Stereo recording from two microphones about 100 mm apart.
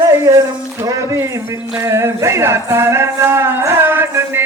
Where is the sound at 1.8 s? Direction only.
25° right (ahead or behind).